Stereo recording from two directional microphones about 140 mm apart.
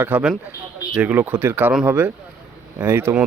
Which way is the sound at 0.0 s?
10° right (ahead or behind).